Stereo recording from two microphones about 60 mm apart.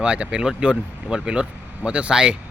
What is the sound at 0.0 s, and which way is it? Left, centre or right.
Speech, centre.